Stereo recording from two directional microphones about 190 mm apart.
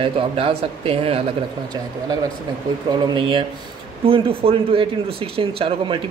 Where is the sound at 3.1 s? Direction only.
25° right (ahead or behind).